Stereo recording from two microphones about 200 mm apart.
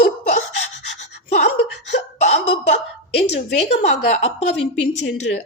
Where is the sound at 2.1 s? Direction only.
35° left (ahead or behind).